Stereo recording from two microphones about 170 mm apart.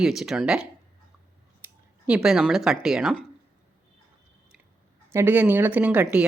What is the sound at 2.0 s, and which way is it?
A woman's voice, 5° right (ahead or behind).